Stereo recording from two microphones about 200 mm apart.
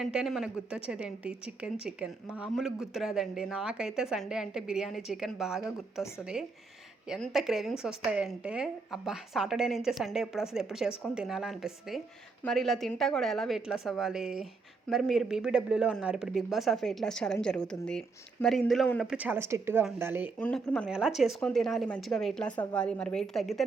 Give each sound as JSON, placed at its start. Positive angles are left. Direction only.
{"t": 0.0, "sound": "speech", "side_deg": 0}
{"t": 7.1, "sound": "speech", "side_deg": 0}
{"t": 20.4, "sound": "speech", "side_deg": 5}